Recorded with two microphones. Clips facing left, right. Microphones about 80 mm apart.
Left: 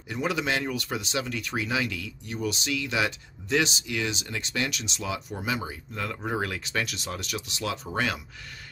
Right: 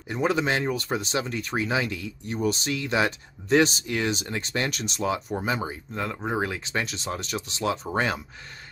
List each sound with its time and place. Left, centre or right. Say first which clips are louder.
0.1 s speech: right 3 dB; right